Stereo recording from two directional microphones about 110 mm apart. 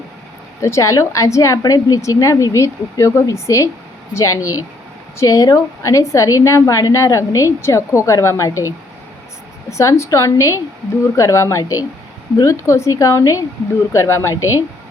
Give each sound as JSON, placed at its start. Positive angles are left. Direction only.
{"t": 0.6, "sound": "a woman's voice", "side_deg": 30}
{"t": 9.6, "sound": "a woman's voice", "side_deg": 25}